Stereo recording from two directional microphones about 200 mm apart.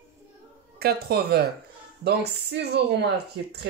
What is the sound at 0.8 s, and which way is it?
Speech, 50° right (ahead or behind).